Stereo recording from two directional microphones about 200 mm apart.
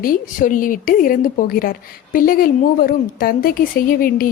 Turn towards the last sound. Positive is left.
turn(degrees=45)  # may be behind; listen again after turning